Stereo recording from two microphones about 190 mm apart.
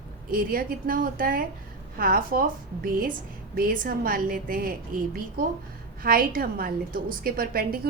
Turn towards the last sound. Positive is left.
turn(degrees=-50)  # may be behind; listen again after turning